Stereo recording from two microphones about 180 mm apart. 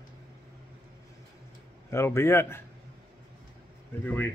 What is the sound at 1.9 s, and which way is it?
Speech, 15° left (ahead or behind).